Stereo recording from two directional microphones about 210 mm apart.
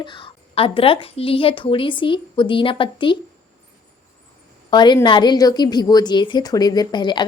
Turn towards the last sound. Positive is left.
turn(degrees=20)  # may be behind; listen again after turning